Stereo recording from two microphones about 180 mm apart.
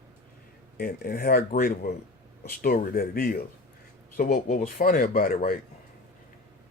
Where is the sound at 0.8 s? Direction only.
55° left (ahead or behind).